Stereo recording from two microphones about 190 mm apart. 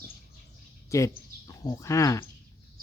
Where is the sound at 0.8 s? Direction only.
15° left (ahead or behind).